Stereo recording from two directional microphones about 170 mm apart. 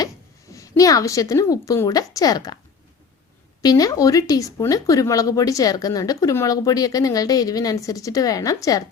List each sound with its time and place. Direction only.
0.5 s speech: 20° left (ahead or behind)
3.6 s speech: 20° left (ahead or behind)